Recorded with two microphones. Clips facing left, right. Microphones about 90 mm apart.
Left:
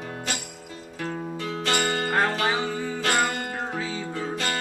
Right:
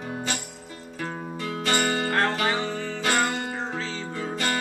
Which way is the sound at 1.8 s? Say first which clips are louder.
Left 1 dB; 10° left (ahead or behind).